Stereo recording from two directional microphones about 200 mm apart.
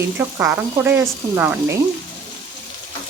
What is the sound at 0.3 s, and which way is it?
Speech, 10° right (ahead or behind).